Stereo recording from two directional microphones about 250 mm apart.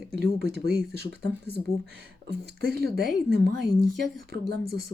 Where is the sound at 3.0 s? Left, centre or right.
Centre.